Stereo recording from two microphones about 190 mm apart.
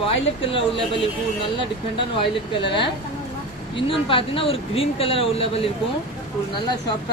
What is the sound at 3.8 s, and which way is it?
Speech, 30° left (ahead or behind).